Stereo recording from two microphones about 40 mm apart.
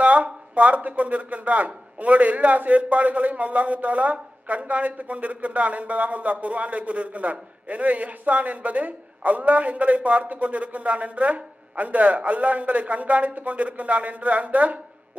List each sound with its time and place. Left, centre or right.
0.0 s speech: right